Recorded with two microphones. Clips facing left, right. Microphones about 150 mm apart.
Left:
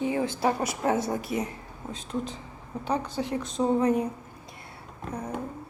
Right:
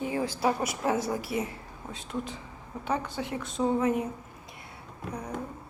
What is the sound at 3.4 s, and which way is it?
Speech, 20° left (ahead or behind).